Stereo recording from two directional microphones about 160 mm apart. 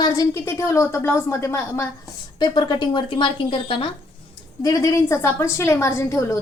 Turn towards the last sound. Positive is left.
turn(degrees=20)  # may be behind; listen again after turning